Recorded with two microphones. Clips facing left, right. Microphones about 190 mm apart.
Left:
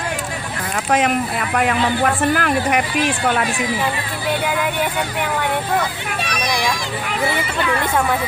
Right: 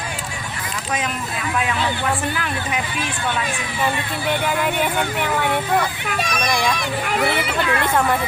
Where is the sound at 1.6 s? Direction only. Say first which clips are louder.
Left 6 dB; 60° left (ahead or behind).